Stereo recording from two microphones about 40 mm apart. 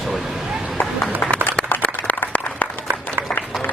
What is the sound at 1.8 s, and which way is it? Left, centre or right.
Applause, left.